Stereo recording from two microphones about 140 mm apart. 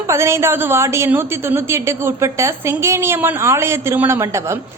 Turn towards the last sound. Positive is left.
turn(degrees=-20)  # may be behind; listen again after turning